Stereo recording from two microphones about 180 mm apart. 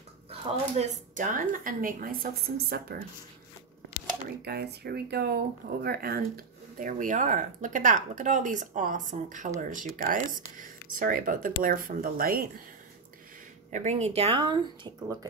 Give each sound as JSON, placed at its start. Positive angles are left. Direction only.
{"t": 0.3, "sound": "speech", "side_deg": -35}
{"t": 4.5, "sound": "speech", "side_deg": -60}
{"t": 13.7, "sound": "speech", "side_deg": -40}